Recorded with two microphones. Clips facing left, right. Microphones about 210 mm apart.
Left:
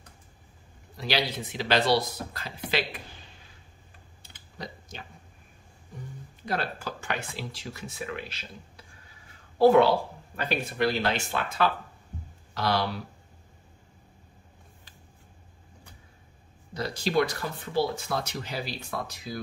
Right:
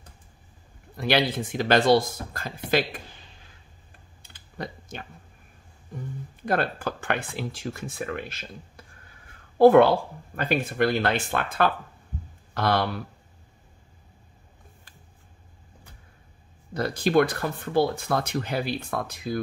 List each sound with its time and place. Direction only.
0.9 s speech: 55° right (ahead or behind)
4.6 s a sound: 55° right (ahead or behind)
6.4 s speech: 55° right (ahead or behind)
16.7 s speech: 55° right (ahead or behind)